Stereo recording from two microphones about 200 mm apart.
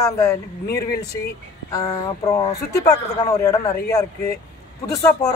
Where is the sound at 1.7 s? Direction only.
20° left (ahead or behind).